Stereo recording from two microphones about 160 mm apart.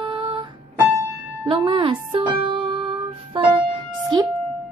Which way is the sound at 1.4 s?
30° right (ahead or behind).